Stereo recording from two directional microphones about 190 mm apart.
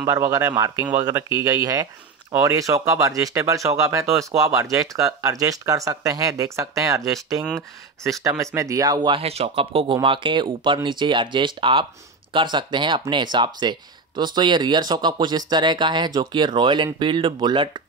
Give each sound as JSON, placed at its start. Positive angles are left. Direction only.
{"t": 0.0, "sound": "speech", "side_deg": -15}